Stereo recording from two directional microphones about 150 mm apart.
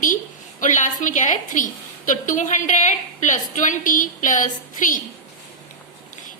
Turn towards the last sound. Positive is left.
turn(degrees=60)  # may be behind; listen again after turning